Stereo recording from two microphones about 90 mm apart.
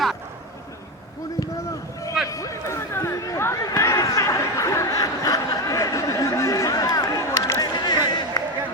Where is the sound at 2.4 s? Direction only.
30° left (ahead or behind); by 8.5 s 50° left (ahead or behind).